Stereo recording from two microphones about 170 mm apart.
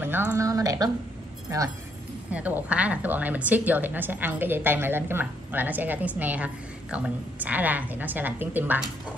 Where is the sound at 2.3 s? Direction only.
10° right (ahead or behind).